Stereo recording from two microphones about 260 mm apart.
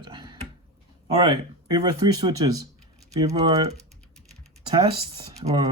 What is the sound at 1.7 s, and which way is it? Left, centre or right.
Speech, centre.